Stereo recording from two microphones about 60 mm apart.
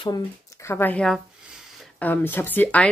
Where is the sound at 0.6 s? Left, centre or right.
Left.